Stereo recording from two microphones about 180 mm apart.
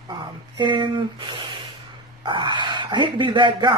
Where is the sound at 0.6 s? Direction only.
25° right (ahead or behind).